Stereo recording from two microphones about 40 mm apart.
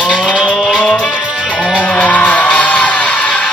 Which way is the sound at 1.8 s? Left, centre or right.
Left.